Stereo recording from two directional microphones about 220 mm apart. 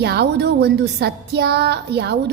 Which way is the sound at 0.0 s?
45° right (ahead or behind).